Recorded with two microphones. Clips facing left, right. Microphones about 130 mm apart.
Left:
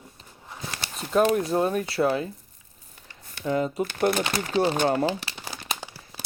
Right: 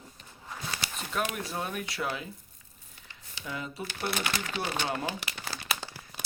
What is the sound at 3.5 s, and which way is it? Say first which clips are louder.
Speech: left 12 dB; 40° left (ahead or behind).